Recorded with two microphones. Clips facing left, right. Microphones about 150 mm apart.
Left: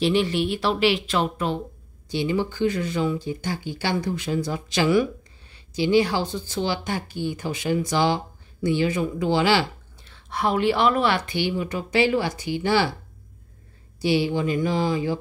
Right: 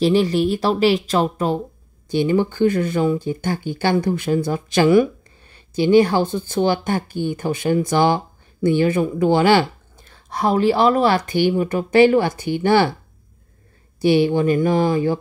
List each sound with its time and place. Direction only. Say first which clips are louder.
0.0 s speech: right 5 dB; 40° right (ahead or behind)
2.0 s speech: right 6 dB; 50° right (ahead or behind)
14.0 s speech: right 6 dB; 55° right (ahead or behind)